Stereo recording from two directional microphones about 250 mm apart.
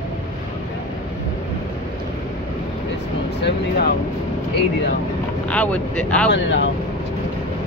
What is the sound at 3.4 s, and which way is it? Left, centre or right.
Speech, left.